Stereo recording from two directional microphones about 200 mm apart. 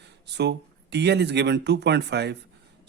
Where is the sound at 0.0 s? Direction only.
60° right (ahead or behind).